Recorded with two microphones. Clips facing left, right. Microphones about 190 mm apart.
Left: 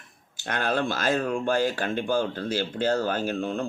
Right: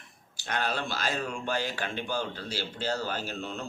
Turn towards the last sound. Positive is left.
turn(degrees=55)  # may be behind; listen again after turning